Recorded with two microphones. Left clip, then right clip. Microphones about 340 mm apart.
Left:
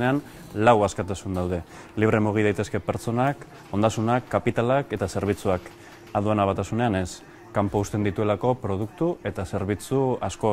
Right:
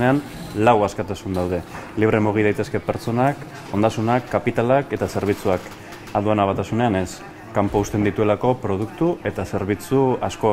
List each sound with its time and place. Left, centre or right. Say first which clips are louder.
0.0 s speech: right 5 dB; left